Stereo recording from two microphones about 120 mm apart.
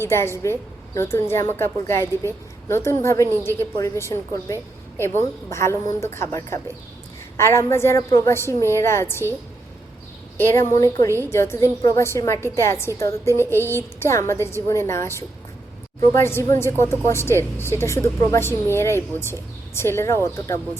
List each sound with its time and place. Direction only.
0.0 s a woman's voice: 20° left (ahead or behind)
10.6 s a woman's voice: 25° left (ahead or behind)
16.1 s a woman's voice: 20° left (ahead or behind)